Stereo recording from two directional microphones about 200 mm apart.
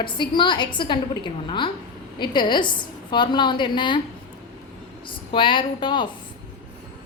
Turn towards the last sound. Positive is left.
turn(degrees=25)  # may be behind; listen again after turning